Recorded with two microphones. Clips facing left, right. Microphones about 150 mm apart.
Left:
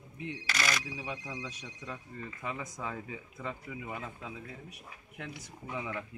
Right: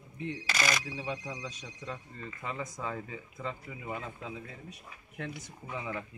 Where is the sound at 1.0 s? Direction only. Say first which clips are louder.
Right 2 dB; 10° left (ahead or behind).